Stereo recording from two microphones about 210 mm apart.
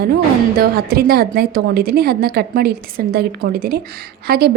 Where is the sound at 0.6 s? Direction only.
45° right (ahead or behind).